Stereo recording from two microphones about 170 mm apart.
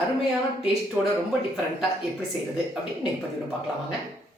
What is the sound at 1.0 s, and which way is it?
Speech, centre (ahead or behind).